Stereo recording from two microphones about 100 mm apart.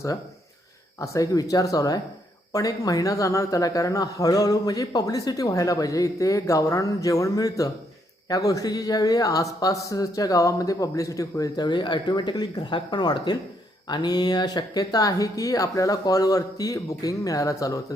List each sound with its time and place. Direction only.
0.9 s speech: 30° left (ahead or behind)